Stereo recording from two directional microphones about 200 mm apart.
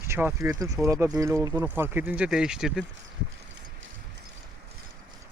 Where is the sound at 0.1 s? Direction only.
10° right (ahead or behind).